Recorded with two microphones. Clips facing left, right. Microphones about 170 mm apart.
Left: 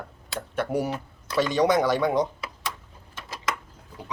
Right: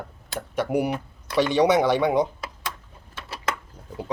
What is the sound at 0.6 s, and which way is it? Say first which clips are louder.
Speech: right 3 dB; 10° right (ahead or behind).